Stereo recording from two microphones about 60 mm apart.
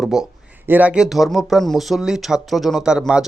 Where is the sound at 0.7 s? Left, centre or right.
Right.